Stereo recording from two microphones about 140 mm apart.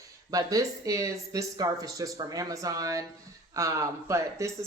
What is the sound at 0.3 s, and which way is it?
Speech, 25° right (ahead or behind).